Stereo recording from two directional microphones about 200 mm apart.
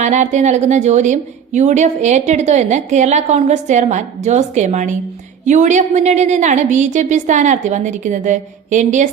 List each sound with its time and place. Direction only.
0.0 s a woman's voice: 35° right (ahead or behind)